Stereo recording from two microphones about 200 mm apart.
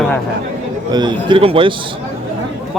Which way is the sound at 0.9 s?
25° right (ahead or behind).